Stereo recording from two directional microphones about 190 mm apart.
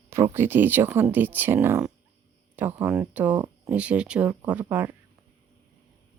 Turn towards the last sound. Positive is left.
turn(degrees=-10)  # may be behind; listen again after turning